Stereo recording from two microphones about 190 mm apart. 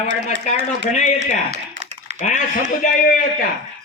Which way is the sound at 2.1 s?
40° left (ahead or behind).